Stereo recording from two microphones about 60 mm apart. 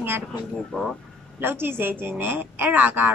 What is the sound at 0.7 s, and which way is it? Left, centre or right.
Speech, centre.